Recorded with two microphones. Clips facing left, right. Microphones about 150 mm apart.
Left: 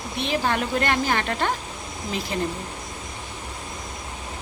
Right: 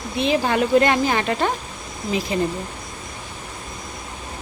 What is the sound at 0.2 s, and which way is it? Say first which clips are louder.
A woman's voice: right 5 dB; 15° right (ahead or behind).